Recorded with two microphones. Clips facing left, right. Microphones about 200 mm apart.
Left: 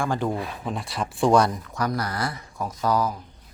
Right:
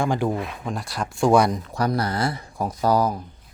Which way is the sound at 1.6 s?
30° right (ahead or behind).